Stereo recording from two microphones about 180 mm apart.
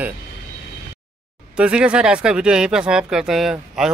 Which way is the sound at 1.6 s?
5° right (ahead or behind).